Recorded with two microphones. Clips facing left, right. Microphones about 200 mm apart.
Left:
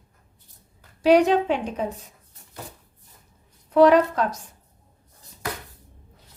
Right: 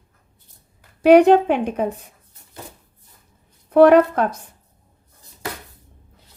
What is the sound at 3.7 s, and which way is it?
Speech, 55° right (ahead or behind).